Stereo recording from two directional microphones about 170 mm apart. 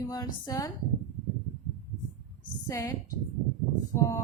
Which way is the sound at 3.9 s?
20° left (ahead or behind).